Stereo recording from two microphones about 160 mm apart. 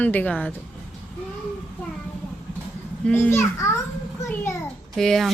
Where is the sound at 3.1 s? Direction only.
15° left (ahead or behind).